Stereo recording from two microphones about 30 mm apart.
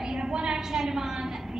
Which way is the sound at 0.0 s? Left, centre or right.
Right.